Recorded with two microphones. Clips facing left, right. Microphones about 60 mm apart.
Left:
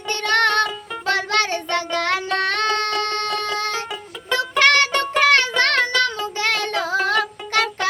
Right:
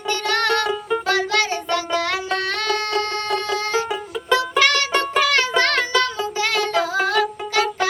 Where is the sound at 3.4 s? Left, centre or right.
Left.